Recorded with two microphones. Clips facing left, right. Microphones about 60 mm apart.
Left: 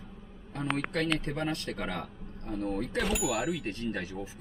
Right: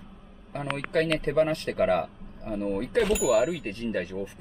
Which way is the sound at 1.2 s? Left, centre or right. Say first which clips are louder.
Right 9 dB; right.